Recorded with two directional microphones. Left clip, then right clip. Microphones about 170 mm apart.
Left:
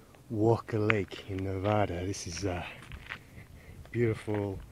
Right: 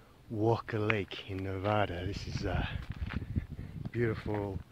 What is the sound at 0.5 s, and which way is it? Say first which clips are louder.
Speech: left 3 dB; 5° left (ahead or behind).